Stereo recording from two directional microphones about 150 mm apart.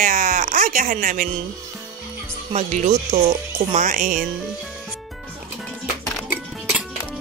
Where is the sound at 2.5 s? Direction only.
50° right (ahead or behind).